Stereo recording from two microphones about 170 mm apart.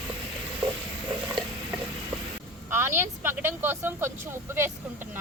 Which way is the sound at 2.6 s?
15° right (ahead or behind).